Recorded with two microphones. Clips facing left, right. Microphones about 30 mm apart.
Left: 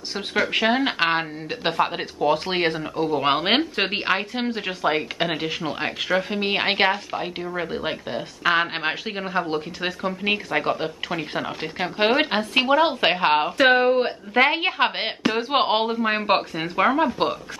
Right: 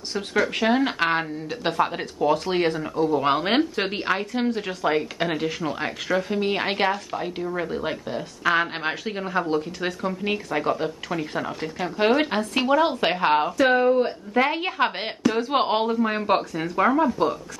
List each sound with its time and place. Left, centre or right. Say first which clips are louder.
0.3 s speech: left 1 dB; left
13.6 s a woman's voice: left 3 dB; left